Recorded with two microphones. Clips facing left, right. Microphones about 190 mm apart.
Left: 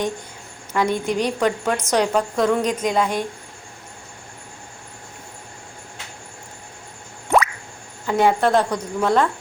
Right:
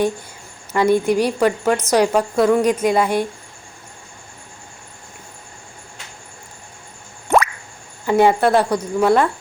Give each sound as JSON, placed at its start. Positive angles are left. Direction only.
{"t": 0.7, "sound": "a woman's voice", "side_deg": -10}
{"t": 8.0, "sound": "a woman's voice", "side_deg": -10}